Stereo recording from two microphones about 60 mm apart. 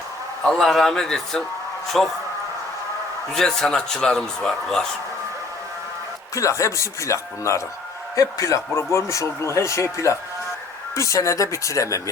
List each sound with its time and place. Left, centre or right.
0.4 s a man's voice: centre
3.3 s a man's voice: centre
6.3 s speech: left